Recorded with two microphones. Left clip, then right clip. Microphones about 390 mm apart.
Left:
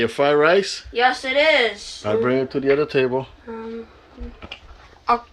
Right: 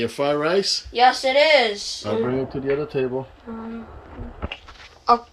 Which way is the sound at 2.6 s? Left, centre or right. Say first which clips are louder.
Left 6 dB; centre.